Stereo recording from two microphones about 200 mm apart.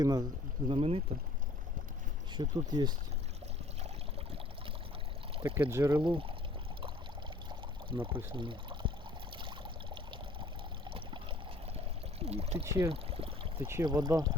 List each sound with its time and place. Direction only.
0.0 s speech: 20° right (ahead or behind)
2.3 s speech: 20° right (ahead or behind)
5.5 s speech: 10° right (ahead or behind)
7.9 s speech: 25° right (ahead or behind)
8.3 s pour: 25° right (ahead or behind)
9.4 s water: 25° right (ahead or behind)
12.2 s speech: 30° right (ahead or behind)
12.6 s speech: 15° right (ahead or behind)
12.9 s pour: 30° right (ahead or behind)
13.7 s speech: 15° right (ahead or behind)